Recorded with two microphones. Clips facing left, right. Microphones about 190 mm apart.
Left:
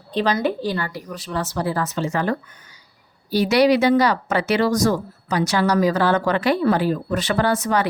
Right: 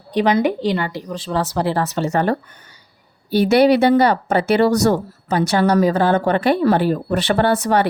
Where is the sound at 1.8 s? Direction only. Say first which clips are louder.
Right 4 dB; 65° right (ahead or behind).